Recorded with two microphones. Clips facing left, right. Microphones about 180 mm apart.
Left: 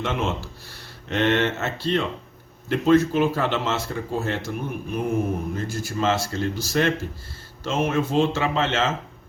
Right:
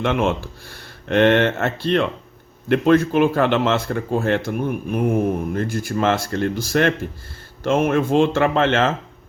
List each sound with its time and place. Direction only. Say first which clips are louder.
0.0 s speech: right 6 dB; 60° right (ahead or behind)